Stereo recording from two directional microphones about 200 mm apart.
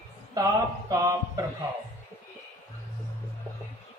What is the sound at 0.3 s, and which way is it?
A man's voice, 20° right (ahead or behind).